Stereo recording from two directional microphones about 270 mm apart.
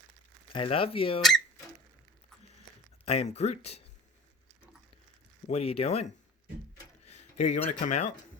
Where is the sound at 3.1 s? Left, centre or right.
Left.